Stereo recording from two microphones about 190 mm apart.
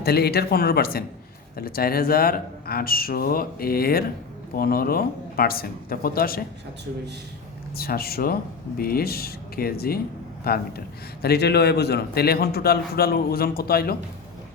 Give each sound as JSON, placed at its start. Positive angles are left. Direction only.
{"t": 0.0, "sound": "speech", "side_deg": 55}
{"t": 7.8, "sound": "a man's voice", "side_deg": 55}